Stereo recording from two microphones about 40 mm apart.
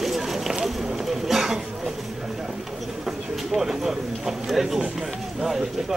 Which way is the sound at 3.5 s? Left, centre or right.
Centre.